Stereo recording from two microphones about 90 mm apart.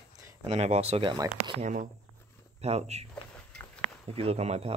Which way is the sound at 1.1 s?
55° right (ahead or behind).